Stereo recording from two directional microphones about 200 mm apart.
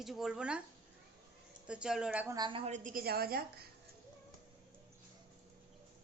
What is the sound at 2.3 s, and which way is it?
A woman's voice, 25° right (ahead or behind).